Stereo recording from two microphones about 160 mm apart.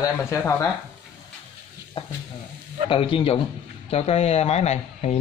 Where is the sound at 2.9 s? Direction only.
35° left (ahead or behind).